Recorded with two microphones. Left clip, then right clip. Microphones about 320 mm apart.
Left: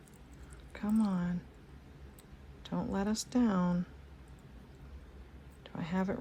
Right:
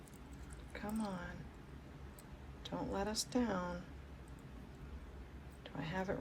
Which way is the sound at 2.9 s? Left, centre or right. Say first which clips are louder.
Left 3 dB; centre.